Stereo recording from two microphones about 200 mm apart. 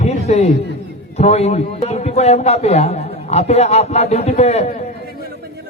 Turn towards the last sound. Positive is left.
turn(degrees=30)  # may be behind; listen again after turning